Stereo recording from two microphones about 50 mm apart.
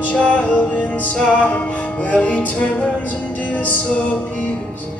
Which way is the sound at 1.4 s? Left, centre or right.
Left.